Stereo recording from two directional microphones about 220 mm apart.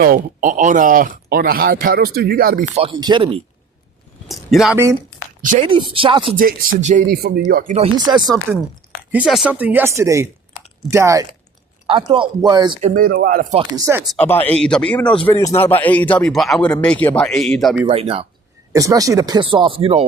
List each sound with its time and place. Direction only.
0.0 s speech: 40° right (ahead or behind)
2.7 s speech: 25° right (ahead or behind)
4.3 s speech: centre (ahead or behind)
5.6 s speech: 25° right (ahead or behind)
6.3 s speech: 40° right (ahead or behind)
7.8 s speech: 20° right (ahead or behind)
9.1 s speech: 5° right (ahead or behind); by 12.8 s 20° right (ahead or behind)
12.8 s speech: 40° right (ahead or behind)
13.6 s speech: 15° right (ahead or behind)
14.1 s a man's voice: 10° left (ahead or behind)
17.8 s speech: 25° right (ahead or behind)
18.7 s speech: 15° right (ahead or behind)